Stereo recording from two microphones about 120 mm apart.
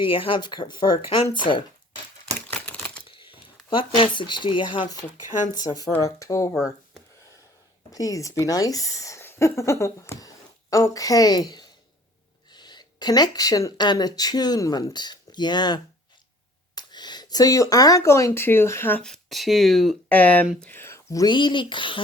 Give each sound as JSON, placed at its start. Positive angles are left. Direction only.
{"t": 0.0, "sound": "speech", "side_deg": 45}
{"t": 2.5, "sound": "crumpling", "side_deg": 10}
{"t": 3.1, "sound": "speech", "side_deg": 45}
{"t": 5.5, "sound": "speech", "side_deg": 30}
{"t": 6.5, "sound": "speech", "side_deg": 0}
{"t": 7.9, "sound": "a woman's voice", "side_deg": 30}
{"t": 19.0, "sound": "speech", "side_deg": 0}
{"t": 20.6, "sound": "a sound", "side_deg": 15}
{"t": 21.2, "sound": "speech", "side_deg": 40}